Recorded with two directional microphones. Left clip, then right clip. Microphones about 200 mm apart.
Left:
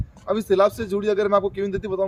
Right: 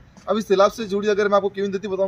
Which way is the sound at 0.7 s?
25° left (ahead or behind).